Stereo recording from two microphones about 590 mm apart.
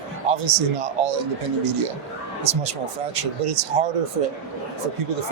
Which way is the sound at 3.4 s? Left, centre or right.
Right.